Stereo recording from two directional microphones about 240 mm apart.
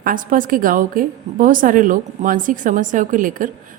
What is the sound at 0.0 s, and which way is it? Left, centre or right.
A woman's voice, right.